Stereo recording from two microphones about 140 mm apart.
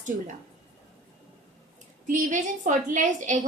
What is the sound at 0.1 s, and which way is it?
Speech, 75° right (ahead or behind).